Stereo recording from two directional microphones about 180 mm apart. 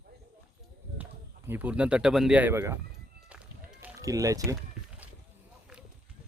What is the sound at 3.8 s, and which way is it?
Speech, 15° right (ahead or behind).